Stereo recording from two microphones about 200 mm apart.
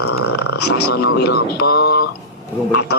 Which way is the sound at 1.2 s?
50° left (ahead or behind).